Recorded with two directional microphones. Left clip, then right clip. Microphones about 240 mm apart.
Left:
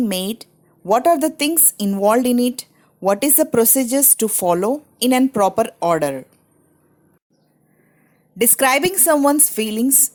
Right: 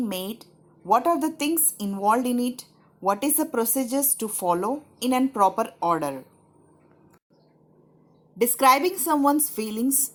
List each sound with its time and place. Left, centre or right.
0.0 s a woman's voice: left
8.4 s speech: left